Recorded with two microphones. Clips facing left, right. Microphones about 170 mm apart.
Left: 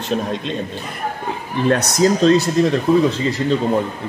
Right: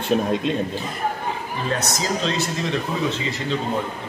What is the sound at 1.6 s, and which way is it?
Speech, 55° left (ahead or behind).